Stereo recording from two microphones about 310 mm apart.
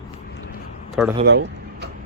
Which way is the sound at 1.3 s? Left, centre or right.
Right.